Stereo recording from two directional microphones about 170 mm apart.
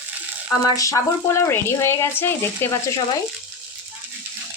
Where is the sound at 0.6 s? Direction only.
20° left (ahead or behind).